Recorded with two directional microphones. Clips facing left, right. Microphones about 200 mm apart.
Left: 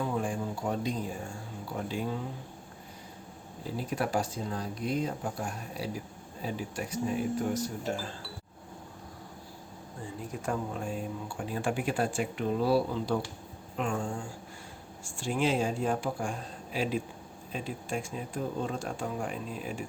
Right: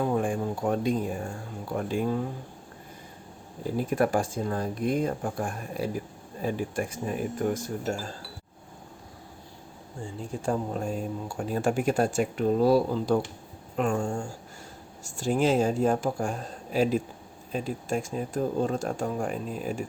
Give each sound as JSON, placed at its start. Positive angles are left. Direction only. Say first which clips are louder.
{"t": 0.2, "sound": "speech", "louder": "right 5 dB", "side_deg": -55}
{"t": 3.8, "sound": "speech", "louder": "right 6 dB", "side_deg": -50}
{"t": 10.2, "sound": "speech", "louder": "right 5 dB", "side_deg": -30}